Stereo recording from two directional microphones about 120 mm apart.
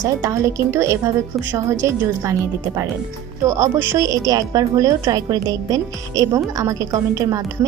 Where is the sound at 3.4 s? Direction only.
25° right (ahead or behind).